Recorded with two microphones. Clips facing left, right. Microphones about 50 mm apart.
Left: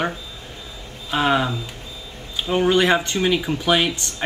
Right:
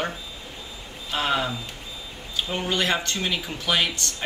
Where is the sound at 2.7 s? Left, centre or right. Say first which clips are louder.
Left 5 dB; left.